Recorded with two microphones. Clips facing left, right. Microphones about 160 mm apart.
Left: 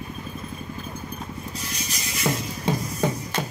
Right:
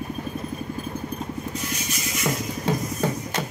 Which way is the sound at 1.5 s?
35° left (ahead or behind).